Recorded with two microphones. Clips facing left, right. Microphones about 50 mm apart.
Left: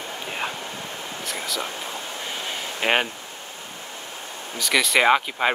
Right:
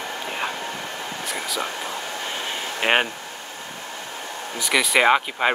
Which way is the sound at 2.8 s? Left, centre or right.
Centre.